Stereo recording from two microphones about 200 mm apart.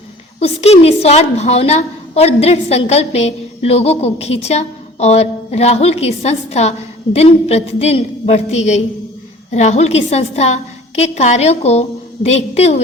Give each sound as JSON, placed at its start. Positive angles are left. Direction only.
{"t": 0.3, "sound": "a woman's voice", "side_deg": 30}